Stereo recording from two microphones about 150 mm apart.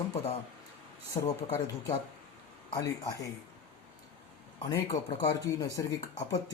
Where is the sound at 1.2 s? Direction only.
35° left (ahead or behind).